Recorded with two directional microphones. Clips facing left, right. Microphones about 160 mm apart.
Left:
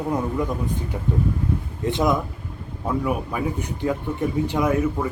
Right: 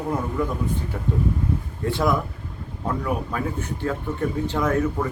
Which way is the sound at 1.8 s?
20° left (ahead or behind).